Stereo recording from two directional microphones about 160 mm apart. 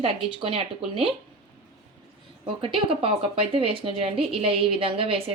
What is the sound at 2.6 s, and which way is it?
Speech, 35° right (ahead or behind).